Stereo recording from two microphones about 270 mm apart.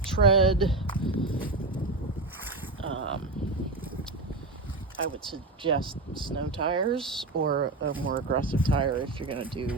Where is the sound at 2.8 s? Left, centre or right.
Right.